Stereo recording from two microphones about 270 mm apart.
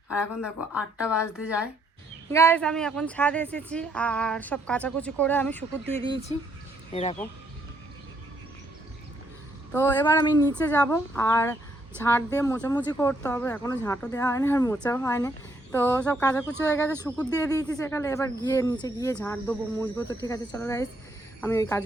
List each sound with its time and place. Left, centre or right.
0.4 s a woman's voice: centre
2.3 s a woman's voice: centre
9.7 s speech: centre